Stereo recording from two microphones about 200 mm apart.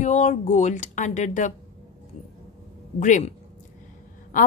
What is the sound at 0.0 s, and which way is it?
A woman's voice, 35° left (ahead or behind).